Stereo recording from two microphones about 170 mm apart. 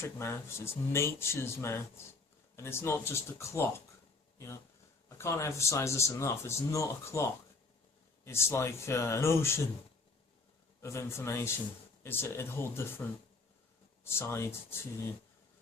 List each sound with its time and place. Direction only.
0.0 s speech: 15° left (ahead or behind)
10.8 s speech: 15° left (ahead or behind)